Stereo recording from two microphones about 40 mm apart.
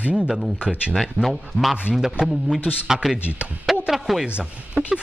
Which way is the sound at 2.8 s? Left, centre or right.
Centre.